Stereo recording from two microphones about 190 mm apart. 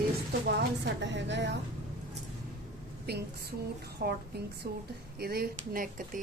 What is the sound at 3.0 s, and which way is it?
Speech, 55° right (ahead or behind).